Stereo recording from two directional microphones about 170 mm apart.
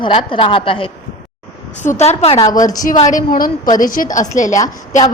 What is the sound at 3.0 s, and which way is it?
A woman's voice, 50° left (ahead or behind).